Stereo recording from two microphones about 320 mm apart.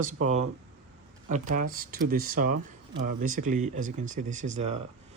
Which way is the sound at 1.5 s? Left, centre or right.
Right.